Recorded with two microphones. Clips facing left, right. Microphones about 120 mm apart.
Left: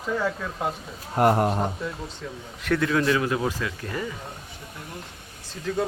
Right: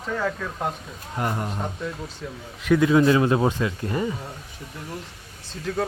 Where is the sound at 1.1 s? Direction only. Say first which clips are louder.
Left 8 dB; 50° left (ahead or behind).